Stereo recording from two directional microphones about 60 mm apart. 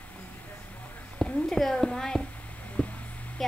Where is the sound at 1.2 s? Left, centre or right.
Centre.